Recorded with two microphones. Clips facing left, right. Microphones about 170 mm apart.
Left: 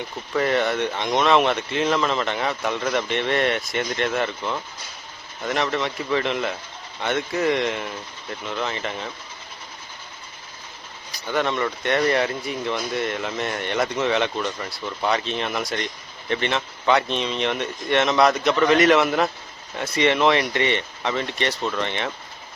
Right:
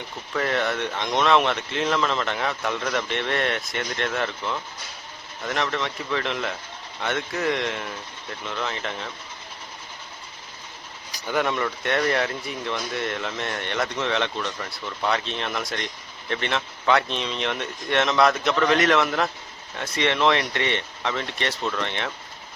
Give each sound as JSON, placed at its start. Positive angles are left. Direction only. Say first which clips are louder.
{"t": 0.3, "sound": "speech", "louder": "left 4 dB", "side_deg": 5}
{"t": 11.3, "sound": "speech", "louder": "left 1 dB", "side_deg": -5}